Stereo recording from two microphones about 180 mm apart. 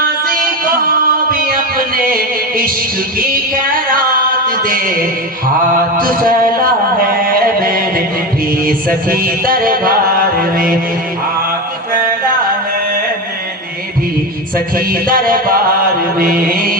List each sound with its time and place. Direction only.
0.0 s music: 55° right (ahead or behind)
3.2 s a sound: 55° right (ahead or behind)
7.2 s music: 55° right (ahead or behind)
8.6 s mantra: 50° right (ahead or behind)
14.8 s mantra: 55° right (ahead or behind)